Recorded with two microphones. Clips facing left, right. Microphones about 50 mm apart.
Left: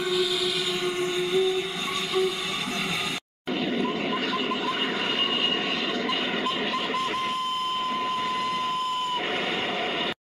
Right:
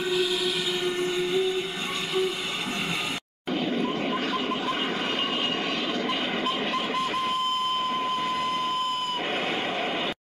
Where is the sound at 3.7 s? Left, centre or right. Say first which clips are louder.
Left 1 dB; left.